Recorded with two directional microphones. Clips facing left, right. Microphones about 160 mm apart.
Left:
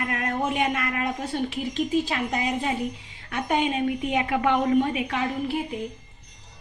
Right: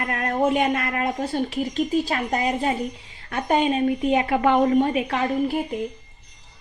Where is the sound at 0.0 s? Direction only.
45° right (ahead or behind).